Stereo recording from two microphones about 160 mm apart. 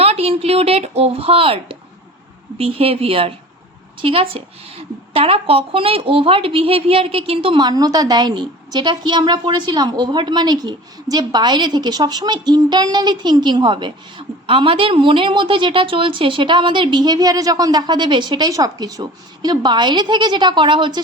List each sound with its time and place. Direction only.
0.0 s a woman's voice: 40° right (ahead or behind)